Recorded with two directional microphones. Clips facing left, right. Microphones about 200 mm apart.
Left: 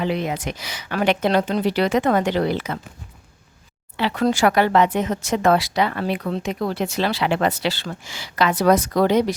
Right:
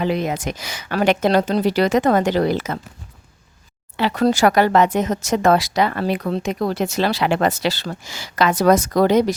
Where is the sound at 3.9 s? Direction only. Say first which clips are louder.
Right 3 dB; 40° right (ahead or behind).